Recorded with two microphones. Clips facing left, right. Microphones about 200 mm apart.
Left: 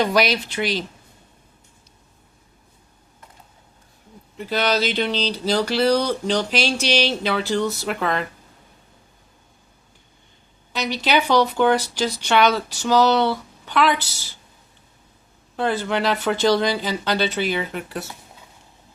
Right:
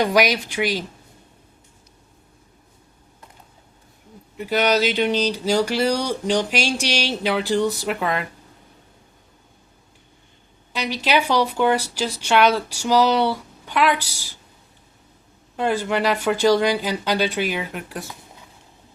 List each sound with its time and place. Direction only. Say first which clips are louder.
0.0 s speech: right 1 dB; 15° right (ahead or behind)
4.4 s speech: right 2 dB; 10° right (ahead or behind)
10.7 s speech: even; 10° right (ahead or behind)
15.5 s speech: right 1 dB; 10° right (ahead or behind)